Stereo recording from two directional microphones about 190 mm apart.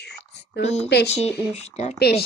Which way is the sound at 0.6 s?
35° left (ahead or behind).